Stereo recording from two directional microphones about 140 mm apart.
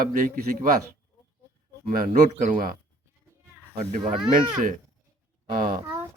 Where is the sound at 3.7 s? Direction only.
55° right (ahead or behind).